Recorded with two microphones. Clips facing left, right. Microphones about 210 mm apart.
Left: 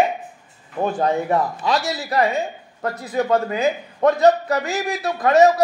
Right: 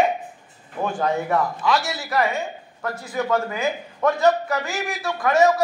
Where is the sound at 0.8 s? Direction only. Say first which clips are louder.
Left 3 dB; 35° left (ahead or behind).